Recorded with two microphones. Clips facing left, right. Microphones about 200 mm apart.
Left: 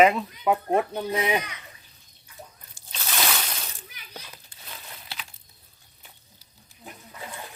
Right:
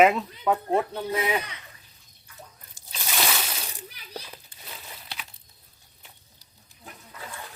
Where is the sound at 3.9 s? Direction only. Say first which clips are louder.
Right 4 dB; 35° right (ahead or behind).